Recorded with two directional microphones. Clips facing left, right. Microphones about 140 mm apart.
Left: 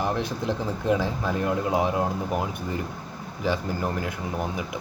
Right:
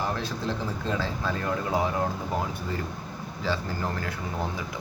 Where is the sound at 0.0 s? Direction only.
20° left (ahead or behind).